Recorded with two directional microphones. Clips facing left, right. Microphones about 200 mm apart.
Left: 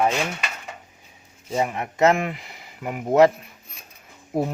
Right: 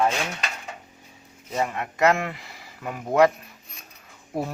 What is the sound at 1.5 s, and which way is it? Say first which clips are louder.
Speech: left 3 dB; 20° left (ahead or behind).